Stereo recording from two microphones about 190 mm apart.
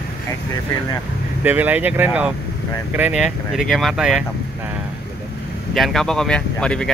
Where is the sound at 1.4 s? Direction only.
10° right (ahead or behind).